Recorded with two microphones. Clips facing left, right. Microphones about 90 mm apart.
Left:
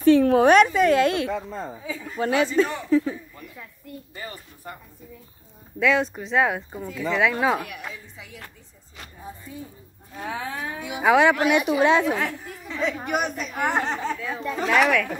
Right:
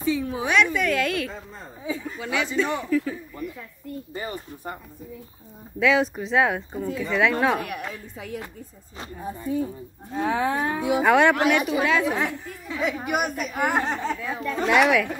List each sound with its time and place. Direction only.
0.0 s a woman's voice: 65° left (ahead or behind)
0.5 s a woman's voice: 40° left (ahead or behind)
2.1 s a woman's voice: 40° left (ahead or behind)
2.8 s a man's voice: 25° left (ahead or behind)
4.1 s speech: 25° right (ahead or behind)
5.8 s speech: centre (ahead or behind)
7.9 s speech: 50° right (ahead or behind)
10.6 s speech: 50° right (ahead or behind)
11.0 s speech: centre (ahead or behind)
11.4 s a woman's voice: 15° left (ahead or behind)
11.8 s a man's voice: 25° left (ahead or behind)
12.6 s speech: 10° right (ahead or behind)